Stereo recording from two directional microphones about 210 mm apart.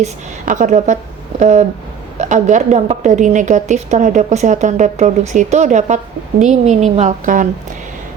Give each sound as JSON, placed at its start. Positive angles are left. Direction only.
{"t": 0.0, "sound": "a woman's voice", "side_deg": -35}